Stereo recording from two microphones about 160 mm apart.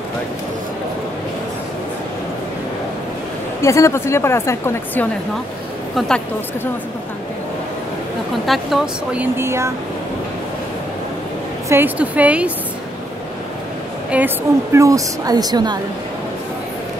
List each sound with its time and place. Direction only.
3.6 s a woman's voice: 20° left (ahead or behind)
5.9 s speech: 5° left (ahead or behind)
8.5 s speech: centre (ahead or behind)
11.7 s speech: 10° right (ahead or behind)
14.1 s a woman's voice: 15° right (ahead or behind)